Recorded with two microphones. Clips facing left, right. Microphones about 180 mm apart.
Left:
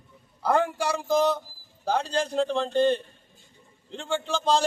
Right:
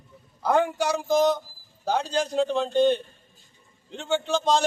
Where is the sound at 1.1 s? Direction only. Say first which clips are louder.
Right 2 dB; 30° left (ahead or behind).